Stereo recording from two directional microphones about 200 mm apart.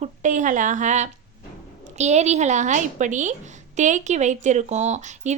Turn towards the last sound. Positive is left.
turn(degrees=-35)  # may be behind; listen again after turning